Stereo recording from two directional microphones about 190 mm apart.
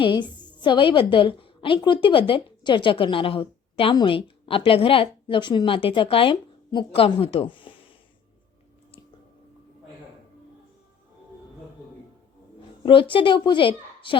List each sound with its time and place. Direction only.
0.0 s a woman's voice: 25° left (ahead or behind)
12.8 s a woman's voice: 25° left (ahead or behind)